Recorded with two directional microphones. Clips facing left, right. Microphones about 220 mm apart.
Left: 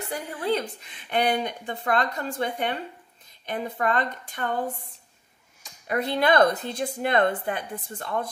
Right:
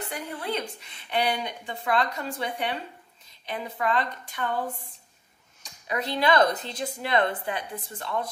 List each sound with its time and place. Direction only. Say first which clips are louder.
0.1 s a woman's voice: left 6 dB; 40° left (ahead or behind)
1.1 s a woman's voice: left 3 dB; 50° left (ahead or behind)
5.9 s a woman's voice: left 2 dB; 50° left (ahead or behind)